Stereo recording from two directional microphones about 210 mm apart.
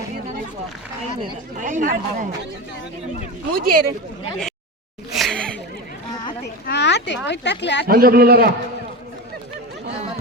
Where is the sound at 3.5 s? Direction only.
45° right (ahead or behind).